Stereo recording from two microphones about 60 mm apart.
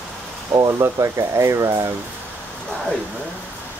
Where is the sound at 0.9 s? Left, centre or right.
Right.